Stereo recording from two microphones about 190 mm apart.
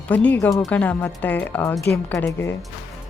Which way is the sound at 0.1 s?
10° left (ahead or behind).